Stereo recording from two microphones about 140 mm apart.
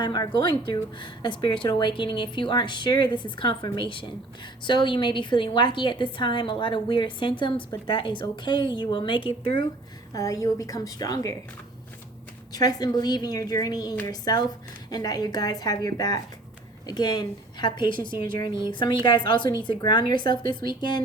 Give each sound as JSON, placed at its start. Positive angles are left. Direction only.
{"t": 0.0, "sound": "a woman's voice", "side_deg": 30}
{"t": 10.2, "sound": "a woman's voice", "side_deg": 25}
{"t": 12.5, "sound": "a woman's voice", "side_deg": 30}